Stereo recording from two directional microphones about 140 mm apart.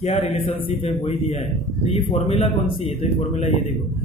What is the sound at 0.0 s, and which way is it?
Speech, 45° left (ahead or behind).